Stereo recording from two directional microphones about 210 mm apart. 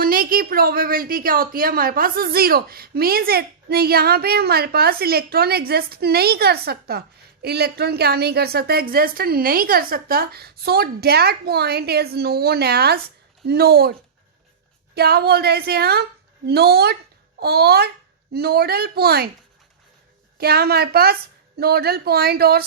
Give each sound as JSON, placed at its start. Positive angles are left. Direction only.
{"t": 0.0, "sound": "a woman's voice", "side_deg": -45}
{"t": 14.9, "sound": "a woman's voice", "side_deg": -50}
{"t": 20.4, "sound": "a woman's voice", "side_deg": -50}